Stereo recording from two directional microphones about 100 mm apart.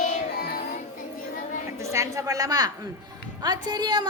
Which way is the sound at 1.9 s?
30° right (ahead or behind).